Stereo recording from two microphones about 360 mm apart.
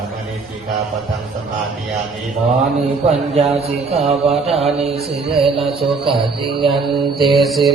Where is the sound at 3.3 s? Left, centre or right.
Centre.